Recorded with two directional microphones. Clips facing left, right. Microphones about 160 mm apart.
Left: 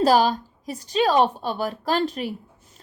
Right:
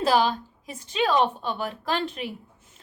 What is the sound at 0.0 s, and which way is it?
A woman's voice, 40° left (ahead or behind).